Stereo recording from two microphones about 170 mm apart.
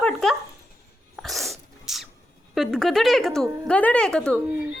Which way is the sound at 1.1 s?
Centre (ahead or behind).